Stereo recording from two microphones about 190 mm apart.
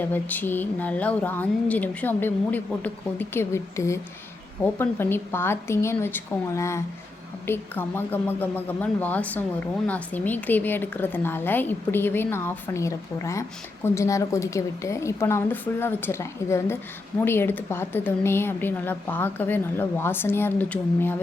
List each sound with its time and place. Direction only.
0.0 s speech: 10° left (ahead or behind)